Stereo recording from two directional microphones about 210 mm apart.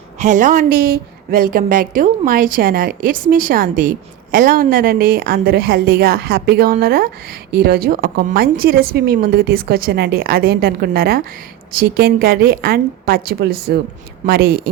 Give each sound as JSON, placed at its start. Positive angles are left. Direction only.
{"t": 0.2, "sound": "a woman's voice", "side_deg": -35}